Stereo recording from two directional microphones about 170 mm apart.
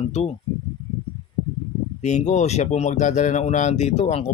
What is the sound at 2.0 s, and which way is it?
Speech, 45° left (ahead or behind).